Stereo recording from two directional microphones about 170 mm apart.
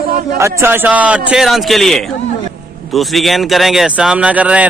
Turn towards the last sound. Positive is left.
turn(degrees=-10)  # may be behind; listen again after turning